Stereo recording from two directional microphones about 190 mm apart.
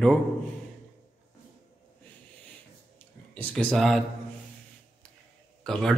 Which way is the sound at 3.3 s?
10° left (ahead or behind).